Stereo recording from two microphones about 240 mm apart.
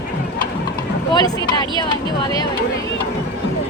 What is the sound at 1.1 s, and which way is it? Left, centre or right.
Speech, centre.